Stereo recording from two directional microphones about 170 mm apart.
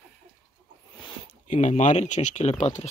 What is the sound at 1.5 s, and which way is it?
Speech, 45° left (ahead or behind).